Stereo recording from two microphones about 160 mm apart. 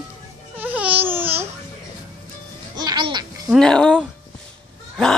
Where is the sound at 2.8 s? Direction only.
25° right (ahead or behind).